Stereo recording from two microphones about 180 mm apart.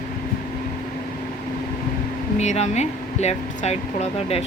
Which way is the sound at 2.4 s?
40° left (ahead or behind).